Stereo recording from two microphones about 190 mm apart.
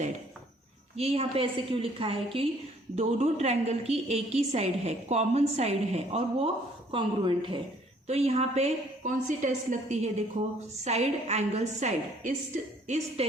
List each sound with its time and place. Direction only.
0.9 s a woman's voice: 30° right (ahead or behind)